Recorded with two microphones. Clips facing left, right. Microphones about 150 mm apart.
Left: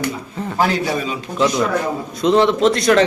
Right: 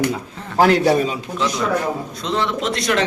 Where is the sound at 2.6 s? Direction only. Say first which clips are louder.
Left 7 dB; 40° left (ahead or behind).